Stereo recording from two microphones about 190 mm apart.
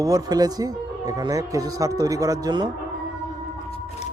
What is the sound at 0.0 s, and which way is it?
Speech, 20° right (ahead or behind).